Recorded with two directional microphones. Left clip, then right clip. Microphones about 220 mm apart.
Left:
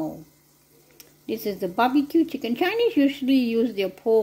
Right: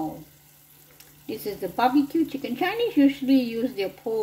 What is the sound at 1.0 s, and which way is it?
Speech, 50° left (ahead or behind).